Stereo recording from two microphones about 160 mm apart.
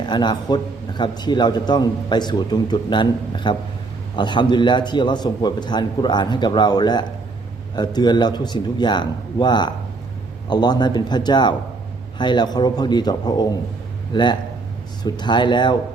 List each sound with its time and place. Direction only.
0.0 s a man's voice: 30° left (ahead or behind)